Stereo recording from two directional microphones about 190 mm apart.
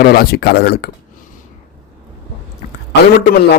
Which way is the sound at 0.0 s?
50° left (ahead or behind).